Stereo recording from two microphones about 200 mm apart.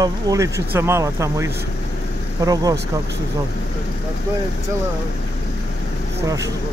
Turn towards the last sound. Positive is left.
turn(degrees=-15)  # may be behind; listen again after turning